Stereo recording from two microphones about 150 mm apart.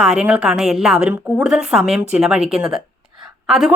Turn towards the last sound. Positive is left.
turn(degrees=0)  # may be behind; listen again after turning